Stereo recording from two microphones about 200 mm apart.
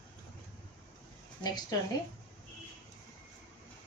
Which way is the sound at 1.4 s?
20° left (ahead or behind).